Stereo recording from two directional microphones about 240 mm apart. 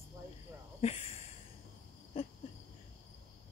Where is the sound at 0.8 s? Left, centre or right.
Left.